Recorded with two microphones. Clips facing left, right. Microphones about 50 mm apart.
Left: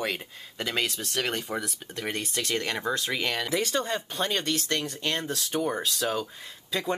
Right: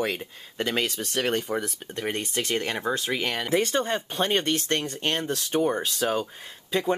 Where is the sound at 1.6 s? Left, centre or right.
Right.